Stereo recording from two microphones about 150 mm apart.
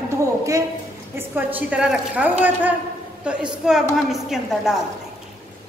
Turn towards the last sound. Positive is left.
turn(degrees=0)  # may be behind; listen again after turning